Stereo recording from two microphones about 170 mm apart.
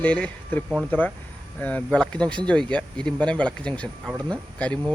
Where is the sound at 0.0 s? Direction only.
10° left (ahead or behind).